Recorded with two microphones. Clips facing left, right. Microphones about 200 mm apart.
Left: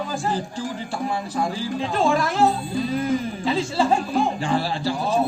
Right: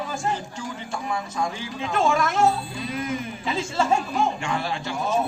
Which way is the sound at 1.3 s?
35° left (ahead or behind).